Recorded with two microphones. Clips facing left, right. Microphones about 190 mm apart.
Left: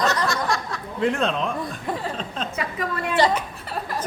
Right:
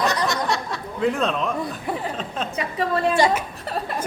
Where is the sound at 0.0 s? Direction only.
15° right (ahead or behind).